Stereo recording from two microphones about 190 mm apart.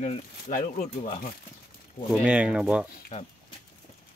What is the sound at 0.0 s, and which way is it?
Speech, 40° left (ahead or behind).